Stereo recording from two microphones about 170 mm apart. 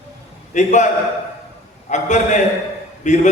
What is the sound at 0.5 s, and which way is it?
Speech, 45° left (ahead or behind).